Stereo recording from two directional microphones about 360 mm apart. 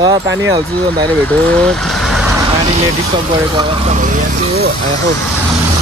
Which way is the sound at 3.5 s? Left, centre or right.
Centre.